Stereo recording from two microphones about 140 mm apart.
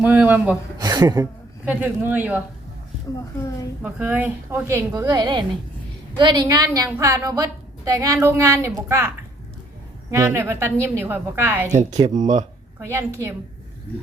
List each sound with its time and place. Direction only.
0.0 s a woman's voice: 15° right (ahead or behind)
0.8 s a sound: 30° right (ahead or behind)
1.6 s a woman's voice: 15° right (ahead or behind)
3.8 s a woman's voice: 10° right (ahead or behind)
4.9 s a woman's voice: 25° right (ahead or behind)
6.8 s a woman's voice: 20° right (ahead or behind)
12.0 s speech: 60° right (ahead or behind)
12.8 s a woman's voice: 15° right (ahead or behind)